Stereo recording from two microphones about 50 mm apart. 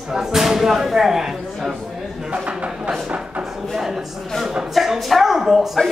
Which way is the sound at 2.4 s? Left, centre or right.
Right.